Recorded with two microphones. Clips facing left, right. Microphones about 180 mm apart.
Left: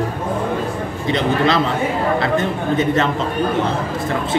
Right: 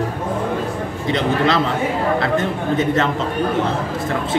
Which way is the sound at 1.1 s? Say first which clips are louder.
Left 1 dB; 20° left (ahead or behind).